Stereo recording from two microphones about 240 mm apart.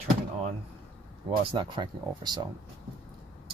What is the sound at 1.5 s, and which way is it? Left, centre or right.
Speech, centre.